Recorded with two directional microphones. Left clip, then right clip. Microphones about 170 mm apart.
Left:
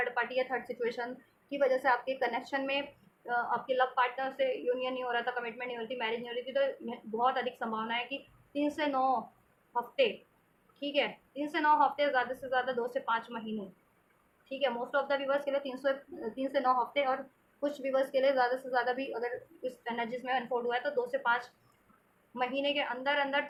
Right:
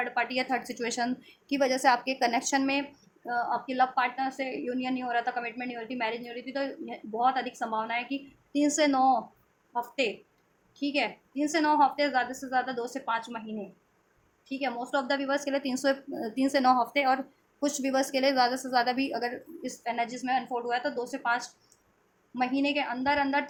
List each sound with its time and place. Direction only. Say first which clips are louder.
0.0 s a woman's voice: right 2 dB; 60° right (ahead or behind)
10.8 s a woman's voice: right 2 dB; 55° right (ahead or behind)
14.9 s a woman's voice: right 4 dB; 55° right (ahead or behind)
15.4 s a woman's voice: right 4 dB; 70° right (ahead or behind)